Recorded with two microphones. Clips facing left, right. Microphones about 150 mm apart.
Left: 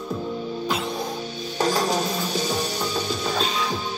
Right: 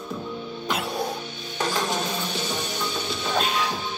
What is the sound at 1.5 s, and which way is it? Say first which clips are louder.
Music: left 4 dB; 40° left (ahead or behind).